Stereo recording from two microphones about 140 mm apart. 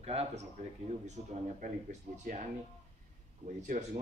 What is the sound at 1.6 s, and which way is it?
Speech, 65° right (ahead or behind).